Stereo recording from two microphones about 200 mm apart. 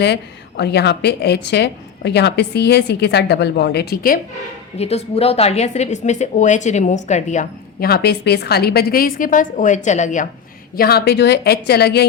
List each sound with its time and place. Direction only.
0.0 s a woman's voice: 55° left (ahead or behind)
4.8 s a woman's voice: 30° left (ahead or behind)
10.8 s a woman's voice: 50° left (ahead or behind)